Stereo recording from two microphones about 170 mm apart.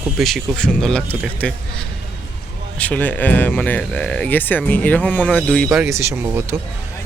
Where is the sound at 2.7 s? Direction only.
10° left (ahead or behind).